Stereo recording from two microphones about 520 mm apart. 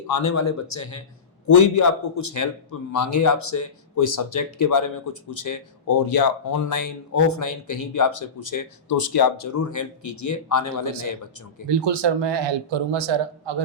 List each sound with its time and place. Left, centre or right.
0.1 s speech: left
11.7 s a man's voice: right